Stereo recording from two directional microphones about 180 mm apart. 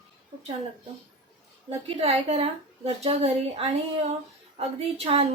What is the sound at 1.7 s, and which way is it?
A woman's voice, 35° right (ahead or behind).